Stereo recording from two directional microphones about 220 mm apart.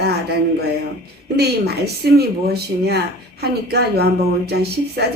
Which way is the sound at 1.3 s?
45° right (ahead or behind).